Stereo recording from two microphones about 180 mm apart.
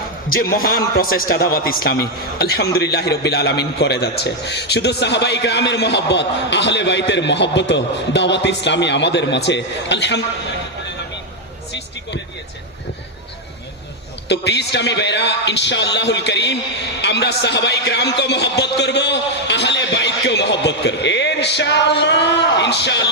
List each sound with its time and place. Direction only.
0.5 s a man's voice: 55° left (ahead or behind); by 10.2 s 75° left (ahead or behind)
14.3 s a man's voice: 70° left (ahead or behind)